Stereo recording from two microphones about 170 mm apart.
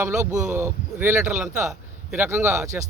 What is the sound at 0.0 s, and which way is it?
Speech, 15° right (ahead or behind).